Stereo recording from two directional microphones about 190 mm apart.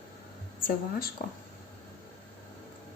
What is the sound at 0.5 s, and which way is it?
Speech, 45° left (ahead or behind).